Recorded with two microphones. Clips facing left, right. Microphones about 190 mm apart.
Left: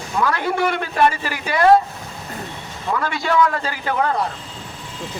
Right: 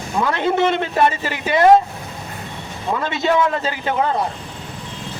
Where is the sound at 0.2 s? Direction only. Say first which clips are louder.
Right 2 dB; 25° right (ahead or behind).